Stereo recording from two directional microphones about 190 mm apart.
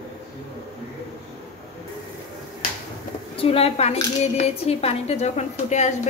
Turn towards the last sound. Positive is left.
turn(degrees=35)  # may be behind; listen again after turning